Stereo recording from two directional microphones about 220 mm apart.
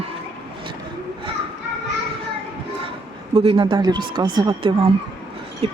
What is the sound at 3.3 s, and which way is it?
Speech, 25° right (ahead or behind).